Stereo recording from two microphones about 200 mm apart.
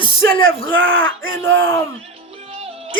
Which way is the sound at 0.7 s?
70° right (ahead or behind).